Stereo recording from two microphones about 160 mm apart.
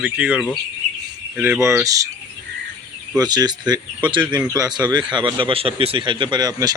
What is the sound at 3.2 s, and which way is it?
Speech, 25° right (ahead or behind).